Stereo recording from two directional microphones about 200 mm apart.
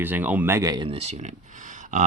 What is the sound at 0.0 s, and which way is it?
Speech, 10° right (ahead or behind).